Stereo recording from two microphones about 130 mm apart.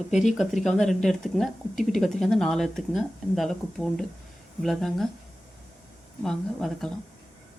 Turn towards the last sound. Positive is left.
turn(degrees=5)  # may be behind; listen again after turning